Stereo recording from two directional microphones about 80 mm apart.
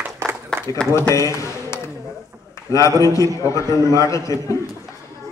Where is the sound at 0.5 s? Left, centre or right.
Centre.